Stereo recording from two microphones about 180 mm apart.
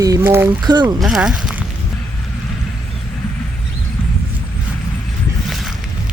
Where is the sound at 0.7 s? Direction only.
25° right (ahead or behind).